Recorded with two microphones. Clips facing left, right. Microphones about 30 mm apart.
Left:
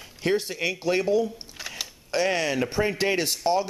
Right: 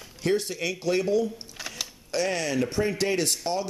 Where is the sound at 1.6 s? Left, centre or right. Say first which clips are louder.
Left 1 dB; centre.